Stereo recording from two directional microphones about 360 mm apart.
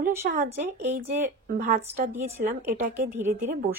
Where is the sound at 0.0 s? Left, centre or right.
Centre.